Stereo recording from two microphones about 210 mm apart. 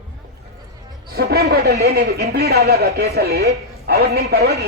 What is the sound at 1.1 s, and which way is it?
Speech, 45° right (ahead or behind).